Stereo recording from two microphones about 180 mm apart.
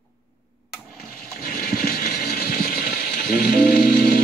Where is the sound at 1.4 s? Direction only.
55° left (ahead or behind).